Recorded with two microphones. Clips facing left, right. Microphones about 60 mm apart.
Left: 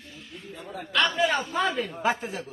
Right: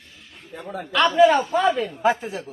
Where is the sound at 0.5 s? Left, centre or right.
Right.